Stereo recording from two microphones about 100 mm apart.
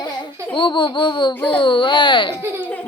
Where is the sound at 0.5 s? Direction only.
55° left (ahead or behind).